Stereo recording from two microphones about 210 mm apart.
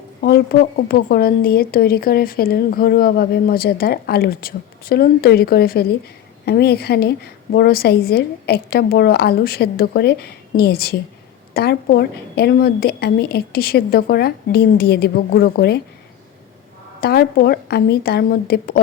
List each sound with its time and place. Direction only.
0.2 s a woman's voice: 50° left (ahead or behind)
17.0 s a woman's voice: 50° left (ahead or behind)